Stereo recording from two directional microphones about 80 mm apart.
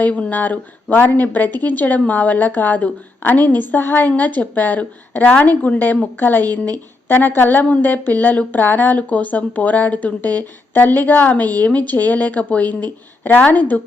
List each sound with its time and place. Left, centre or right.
0.0 s speech: centre